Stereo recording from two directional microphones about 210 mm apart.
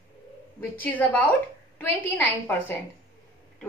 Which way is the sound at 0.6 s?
10° left (ahead or behind).